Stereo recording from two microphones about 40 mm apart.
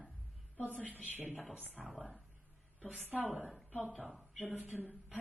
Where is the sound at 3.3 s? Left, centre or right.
Right.